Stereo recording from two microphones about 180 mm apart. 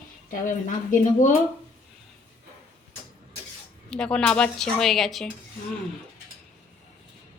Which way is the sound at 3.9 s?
5° left (ahead or behind).